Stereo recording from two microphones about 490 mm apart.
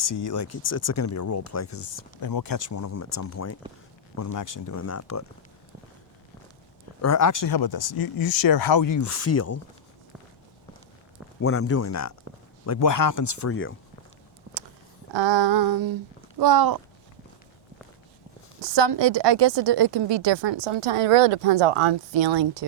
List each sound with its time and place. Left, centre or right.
0.0 s speech: left
7.0 s speech: left
11.3 s speech: left
14.5 s a sound: right
15.1 s female singing: right
18.6 s a woman's voice: right